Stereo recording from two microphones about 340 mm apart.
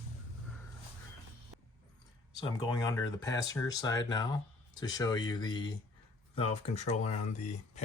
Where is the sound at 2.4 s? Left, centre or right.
Centre.